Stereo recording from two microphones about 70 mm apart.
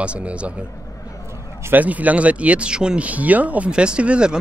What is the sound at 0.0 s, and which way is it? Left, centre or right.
Speech, centre.